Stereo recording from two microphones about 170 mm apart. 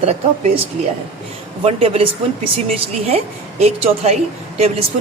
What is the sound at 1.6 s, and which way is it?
A woman's voice, 35° right (ahead or behind).